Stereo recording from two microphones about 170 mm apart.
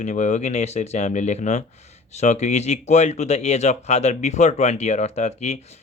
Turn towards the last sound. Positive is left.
turn(degrees=40)  # may be behind; listen again after turning